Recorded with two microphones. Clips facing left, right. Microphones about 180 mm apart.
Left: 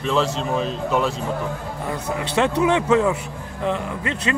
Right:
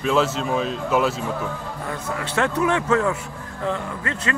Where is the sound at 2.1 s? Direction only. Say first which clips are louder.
Left 3 dB; 20° left (ahead or behind).